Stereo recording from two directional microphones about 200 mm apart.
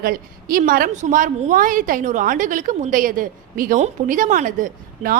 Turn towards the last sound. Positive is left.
turn(degrees=-45)  # may be behind; listen again after turning